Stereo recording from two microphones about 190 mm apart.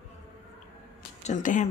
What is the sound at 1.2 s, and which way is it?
Speech, 40° left (ahead or behind).